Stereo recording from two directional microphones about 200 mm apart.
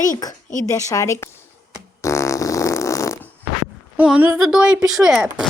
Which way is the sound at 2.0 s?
15° left (ahead or behind).